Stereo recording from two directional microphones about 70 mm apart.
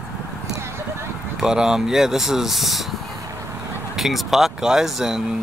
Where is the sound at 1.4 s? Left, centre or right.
Centre.